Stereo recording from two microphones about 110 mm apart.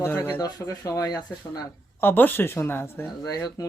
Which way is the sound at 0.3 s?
35° left (ahead or behind).